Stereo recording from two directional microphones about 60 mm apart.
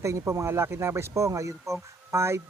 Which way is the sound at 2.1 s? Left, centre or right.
Right.